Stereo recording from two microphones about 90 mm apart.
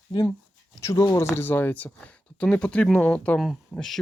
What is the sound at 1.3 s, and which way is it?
Speech, 20° left (ahead or behind).